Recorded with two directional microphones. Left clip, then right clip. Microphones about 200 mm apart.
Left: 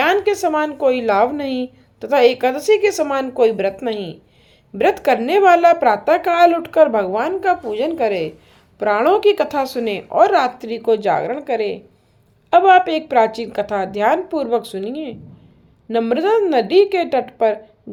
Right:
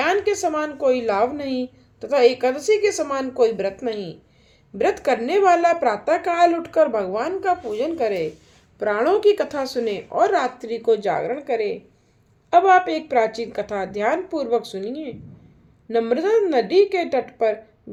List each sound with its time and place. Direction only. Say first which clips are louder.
0.0 s a woman's voice: left 4 dB; 25° left (ahead or behind)